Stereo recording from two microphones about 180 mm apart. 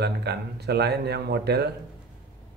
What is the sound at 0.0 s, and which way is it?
Speech, 65° right (ahead or behind).